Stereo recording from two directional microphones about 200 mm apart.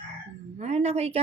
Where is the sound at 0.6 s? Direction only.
35° right (ahead or behind).